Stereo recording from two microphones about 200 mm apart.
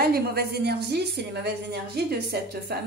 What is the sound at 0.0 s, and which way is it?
A woman's voice, 50° right (ahead or behind).